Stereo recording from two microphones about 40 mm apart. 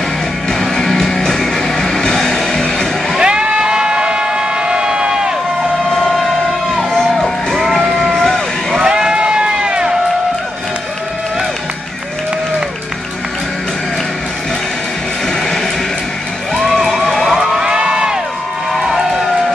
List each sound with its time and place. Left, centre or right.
0.5 s music: centre
3.2 s siren: right
5.9 s siren: centre
7.2 s music: centre
7.8 s a sound: centre
8.1 s vehicle: centre
8.8 s a sound: right
16.5 s emergency vehicle: centre
17.6 s crowd: right
18.7 s vehicle: centre